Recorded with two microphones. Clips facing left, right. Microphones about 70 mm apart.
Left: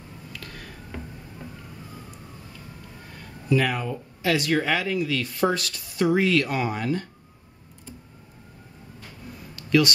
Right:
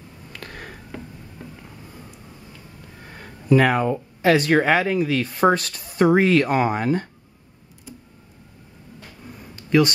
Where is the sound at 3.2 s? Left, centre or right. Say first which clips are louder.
Right 6 dB; right.